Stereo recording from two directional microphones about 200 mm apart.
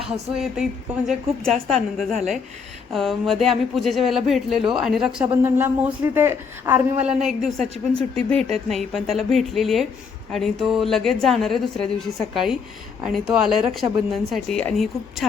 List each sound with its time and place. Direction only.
0.0 s speech: 5° right (ahead or behind)